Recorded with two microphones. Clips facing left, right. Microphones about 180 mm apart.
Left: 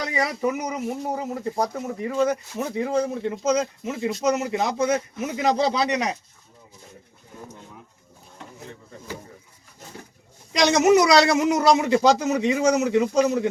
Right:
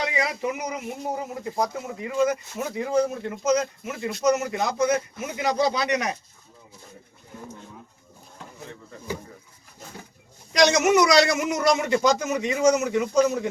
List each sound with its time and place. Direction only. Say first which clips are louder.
0.0 s a man's voice: left 2 dB; 40° left (ahead or behind)
10.5 s a man's voice: left 2 dB; 30° left (ahead or behind)